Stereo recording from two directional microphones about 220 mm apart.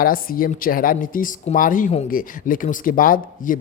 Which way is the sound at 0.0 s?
40° left (ahead or behind).